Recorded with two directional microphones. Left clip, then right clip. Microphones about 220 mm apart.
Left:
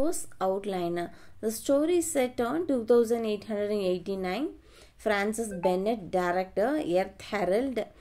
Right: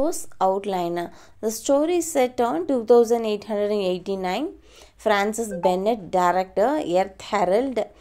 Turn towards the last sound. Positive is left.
turn(degrees=0)  # may be behind; listen again after turning